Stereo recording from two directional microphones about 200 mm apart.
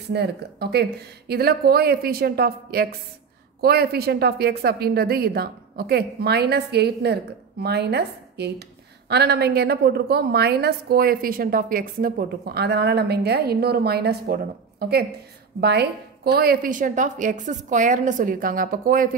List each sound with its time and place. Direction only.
0.1 s a woman's voice: 55° right (ahead or behind)